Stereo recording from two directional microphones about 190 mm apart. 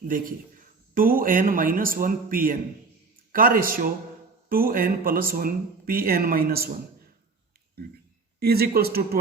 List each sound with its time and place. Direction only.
0.9 s speech: 50° right (ahead or behind)
7.8 s speech: 55° right (ahead or behind)